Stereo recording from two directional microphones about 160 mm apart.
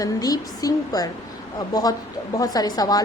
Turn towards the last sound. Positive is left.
turn(degrees=25)  # may be behind; listen again after turning